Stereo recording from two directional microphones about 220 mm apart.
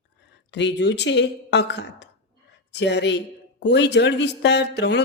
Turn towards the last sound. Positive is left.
turn(degrees=50)  # may be behind; listen again after turning